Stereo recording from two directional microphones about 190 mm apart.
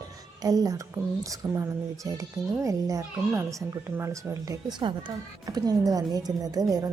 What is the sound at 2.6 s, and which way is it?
Speech, 15° right (ahead or behind).